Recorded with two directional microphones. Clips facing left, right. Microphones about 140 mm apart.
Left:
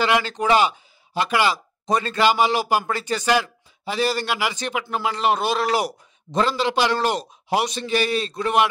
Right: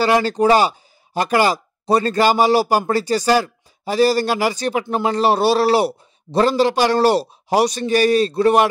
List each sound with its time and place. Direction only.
0.0 s a man's voice: 40° right (ahead or behind)
6.4 s a man's voice: 40° right (ahead or behind)